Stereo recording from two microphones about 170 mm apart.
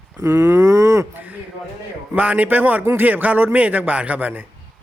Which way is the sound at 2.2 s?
10° right (ahead or behind).